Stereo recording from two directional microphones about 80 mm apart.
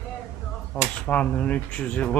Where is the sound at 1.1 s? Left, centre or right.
Centre.